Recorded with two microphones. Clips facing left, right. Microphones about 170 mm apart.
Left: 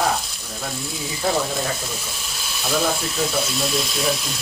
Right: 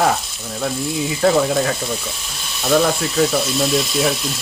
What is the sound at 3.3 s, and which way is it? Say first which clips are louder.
Frying: right 5 dB; centre (ahead or behind).